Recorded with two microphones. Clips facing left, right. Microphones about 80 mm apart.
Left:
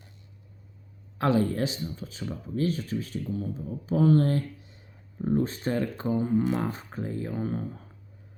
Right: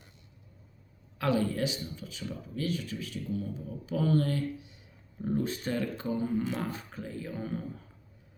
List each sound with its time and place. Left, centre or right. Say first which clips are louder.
1.2 s speech: left 4 dB; left